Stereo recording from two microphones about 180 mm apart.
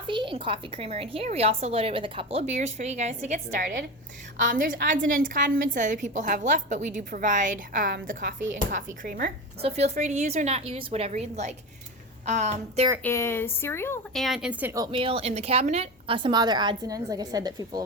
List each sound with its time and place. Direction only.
0.1 s a woman's voice: 25° right (ahead or behind); by 9.3 s 50° right (ahead or behind)
9.6 s a woman's voice: 35° right (ahead or behind)
13.0 s speech: 15° left (ahead or behind)
14.1 s speech: centre (ahead or behind)
14.8 s a woman's voice: 30° right (ahead or behind)